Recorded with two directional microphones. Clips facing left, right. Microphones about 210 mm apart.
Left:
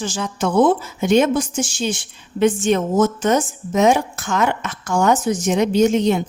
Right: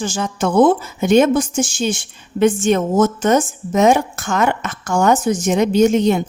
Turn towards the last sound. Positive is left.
turn(degrees=-50)  # may be behind; listen again after turning